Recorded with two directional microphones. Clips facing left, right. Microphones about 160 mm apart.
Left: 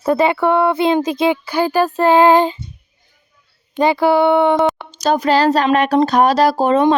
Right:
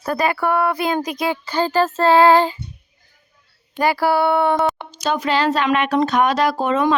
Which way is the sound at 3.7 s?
20° left (ahead or behind).